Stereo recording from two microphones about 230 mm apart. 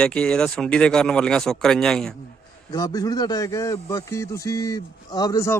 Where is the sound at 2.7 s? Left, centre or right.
Centre.